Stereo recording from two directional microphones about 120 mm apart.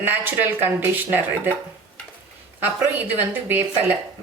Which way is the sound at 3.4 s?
15° right (ahead or behind).